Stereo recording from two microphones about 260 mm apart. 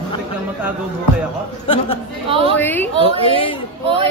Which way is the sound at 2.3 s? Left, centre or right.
Right.